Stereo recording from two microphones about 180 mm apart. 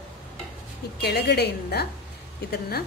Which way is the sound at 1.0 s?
65° left (ahead or behind).